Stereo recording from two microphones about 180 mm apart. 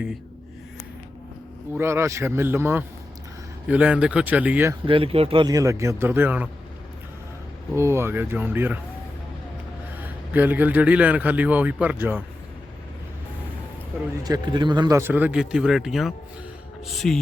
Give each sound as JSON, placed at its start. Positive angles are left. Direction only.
{"t": 1.7, "sound": "a man's voice", "side_deg": -15}
{"t": 4.9, "sound": "a man's voice", "side_deg": -30}
{"t": 7.8, "sound": "a man's voice", "side_deg": -15}
{"t": 10.3, "sound": "a man's voice", "side_deg": -10}
{"t": 14.3, "sound": "a man's voice", "side_deg": -25}